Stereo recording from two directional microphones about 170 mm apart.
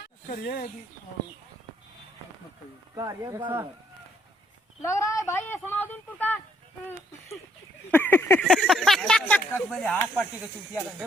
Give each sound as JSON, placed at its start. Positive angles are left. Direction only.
{"t": 0.0, "sound": "snake", "side_deg": 65}
{"t": 2.9, "sound": "speech", "side_deg": -20}
{"t": 4.8, "sound": "speech", "side_deg": 15}
{"t": 7.9, "sound": "speech", "side_deg": 10}